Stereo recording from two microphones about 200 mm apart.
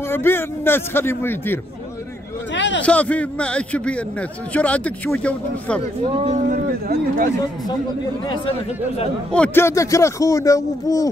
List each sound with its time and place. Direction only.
0.1 s a man's voice: 10° left (ahead or behind)
2.5 s a sound: 65° left (ahead or behind)
2.8 s a man's voice: 5° left (ahead or behind)
6.1 s speech: 35° right (ahead or behind)
9.3 s a man's voice: 10° left (ahead or behind)